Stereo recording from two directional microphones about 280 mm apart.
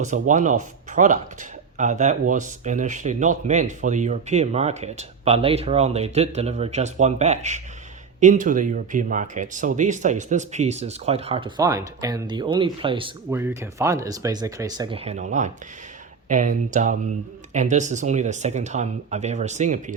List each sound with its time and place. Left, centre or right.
0.0 s speech: right